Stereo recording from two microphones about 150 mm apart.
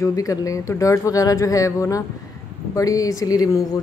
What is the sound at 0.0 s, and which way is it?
Speech, 20° left (ahead or behind).